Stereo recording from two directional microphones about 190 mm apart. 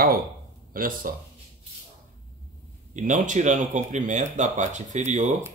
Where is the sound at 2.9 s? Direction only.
40° right (ahead or behind).